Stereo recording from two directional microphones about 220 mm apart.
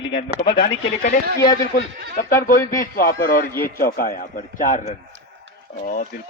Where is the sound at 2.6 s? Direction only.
15° left (ahead or behind).